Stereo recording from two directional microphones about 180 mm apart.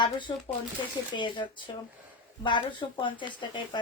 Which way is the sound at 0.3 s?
25° left (ahead or behind).